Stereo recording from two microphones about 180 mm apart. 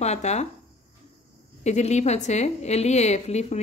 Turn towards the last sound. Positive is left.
turn(degrees=40)  # may be behind; listen again after turning